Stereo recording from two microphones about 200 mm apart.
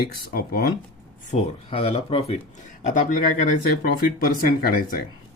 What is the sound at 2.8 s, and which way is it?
Speech, 40° left (ahead or behind).